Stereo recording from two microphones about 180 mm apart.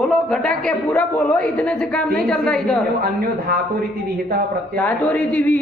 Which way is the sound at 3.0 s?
55° right (ahead or behind).